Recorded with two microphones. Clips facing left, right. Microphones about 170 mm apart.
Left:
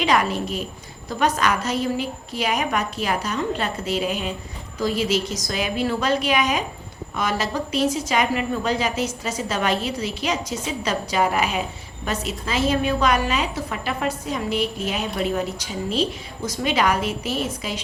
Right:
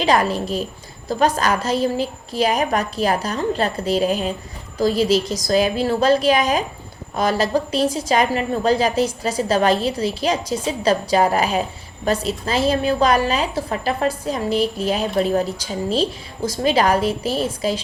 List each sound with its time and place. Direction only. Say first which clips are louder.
0.0 s a woman's voice: right 3 dB; 35° right (ahead or behind)